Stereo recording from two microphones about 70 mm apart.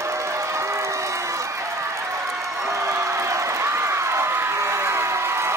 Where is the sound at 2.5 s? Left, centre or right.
Right.